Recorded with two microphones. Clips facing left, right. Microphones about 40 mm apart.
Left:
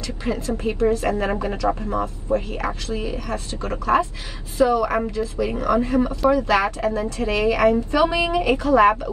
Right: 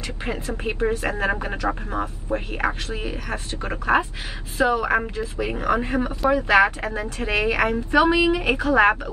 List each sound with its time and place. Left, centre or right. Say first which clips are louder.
0.2 s speech: left 4 dB; right
1.5 s speech: left 3 dB; right